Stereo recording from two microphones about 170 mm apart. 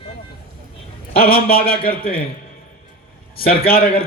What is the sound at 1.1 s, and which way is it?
A man's voice, 65° left (ahead or behind).